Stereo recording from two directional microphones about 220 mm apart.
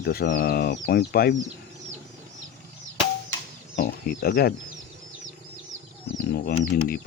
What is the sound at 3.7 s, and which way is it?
Speech, 45° left (ahead or behind).